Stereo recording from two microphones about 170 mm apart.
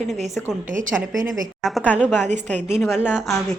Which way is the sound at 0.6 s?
50° right (ahead or behind).